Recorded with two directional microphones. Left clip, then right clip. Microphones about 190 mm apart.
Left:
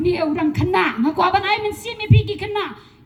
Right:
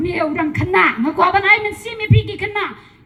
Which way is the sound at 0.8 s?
40° left (ahead or behind).